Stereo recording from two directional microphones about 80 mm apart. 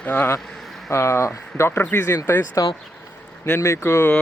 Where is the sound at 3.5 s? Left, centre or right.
Left.